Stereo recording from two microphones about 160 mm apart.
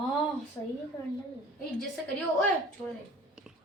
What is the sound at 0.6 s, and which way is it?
Speech, 20° left (ahead or behind).